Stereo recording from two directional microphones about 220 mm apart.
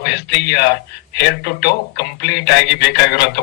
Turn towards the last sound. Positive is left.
turn(degrees=50)  # may be behind; listen again after turning